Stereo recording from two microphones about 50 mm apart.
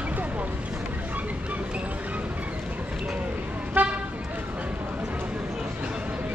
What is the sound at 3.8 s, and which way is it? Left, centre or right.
Vehicle, right.